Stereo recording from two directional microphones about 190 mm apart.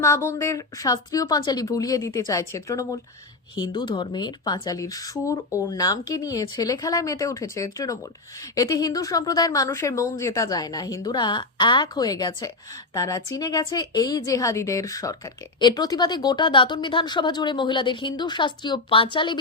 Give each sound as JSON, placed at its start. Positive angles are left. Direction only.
{"t": 0.0, "sound": "speech", "side_deg": 15}